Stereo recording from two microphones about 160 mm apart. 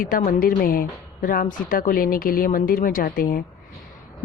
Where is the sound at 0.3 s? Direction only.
65° left (ahead or behind).